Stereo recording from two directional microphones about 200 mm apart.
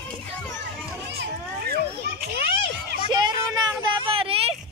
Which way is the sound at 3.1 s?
20° right (ahead or behind).